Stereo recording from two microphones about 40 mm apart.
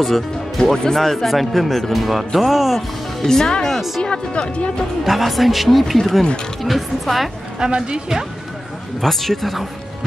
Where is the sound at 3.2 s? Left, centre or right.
Centre.